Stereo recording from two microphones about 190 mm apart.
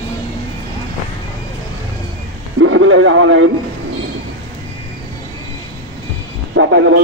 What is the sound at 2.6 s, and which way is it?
Speech, 90° right.